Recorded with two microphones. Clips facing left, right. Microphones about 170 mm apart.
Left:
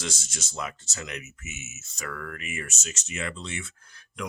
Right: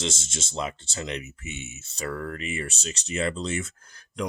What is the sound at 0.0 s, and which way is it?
Speech, 25° right (ahead or behind).